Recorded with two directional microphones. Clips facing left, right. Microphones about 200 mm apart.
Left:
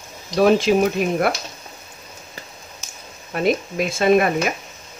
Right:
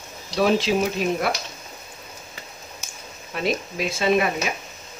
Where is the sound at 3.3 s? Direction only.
50° left (ahead or behind).